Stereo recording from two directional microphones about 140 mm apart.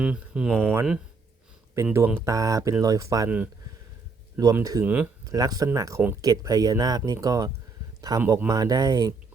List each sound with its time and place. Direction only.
0.0 s speech: 5° right (ahead or behind)
0.6 s speech: 15° right (ahead or behind)
3.2 s speech: 10° right (ahead or behind)
4.6 s speech: 25° right (ahead or behind)
4.9 s speech: 10° right (ahead or behind)
5.2 s speech: 25° right (ahead or behind)
8.2 s speech: 15° right (ahead or behind)
8.4 s speech: 25° right (ahead or behind)